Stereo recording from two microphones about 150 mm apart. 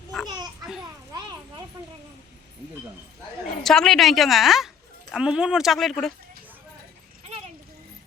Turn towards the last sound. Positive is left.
turn(degrees=0)  # may be behind; listen again after turning